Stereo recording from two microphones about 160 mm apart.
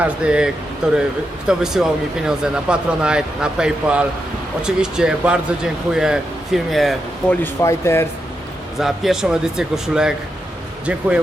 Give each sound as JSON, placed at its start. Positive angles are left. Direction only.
{"t": 0.0, "sound": "speech", "side_deg": -5}
{"t": 7.4, "sound": "speech", "side_deg": 15}
{"t": 8.8, "sound": "speech", "side_deg": -5}